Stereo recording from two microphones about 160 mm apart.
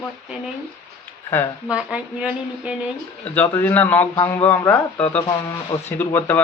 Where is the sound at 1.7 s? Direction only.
5° right (ahead or behind).